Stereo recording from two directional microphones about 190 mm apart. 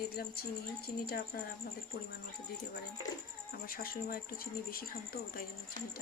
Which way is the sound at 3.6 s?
50° left (ahead or behind).